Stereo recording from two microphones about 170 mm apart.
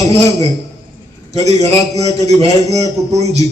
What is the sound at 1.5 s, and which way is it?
Speech, 40° right (ahead or behind).